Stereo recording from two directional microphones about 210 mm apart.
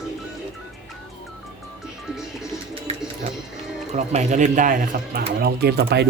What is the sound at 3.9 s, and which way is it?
A man's voice, 35° right (ahead or behind).